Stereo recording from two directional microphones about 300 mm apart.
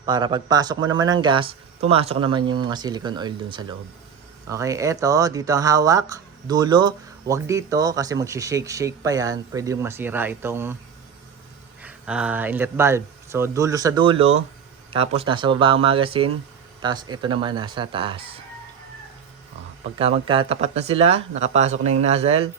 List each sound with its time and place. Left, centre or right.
0.0 s speech: centre
11.8 s speech: centre
20.0 s speech: centre